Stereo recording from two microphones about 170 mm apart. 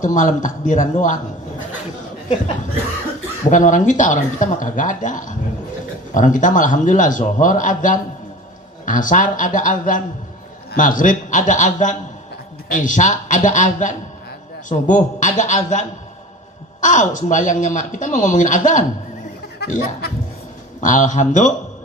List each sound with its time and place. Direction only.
0.0 s speech: 50° left (ahead or behind)
3.5 s speech: 50° left (ahead or behind)
19.6 s a sound: 55° left (ahead or behind)
20.8 s speech: 50° left (ahead or behind)